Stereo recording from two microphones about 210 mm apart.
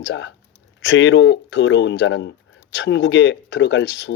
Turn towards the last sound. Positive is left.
turn(degrees=55)  # may be behind; listen again after turning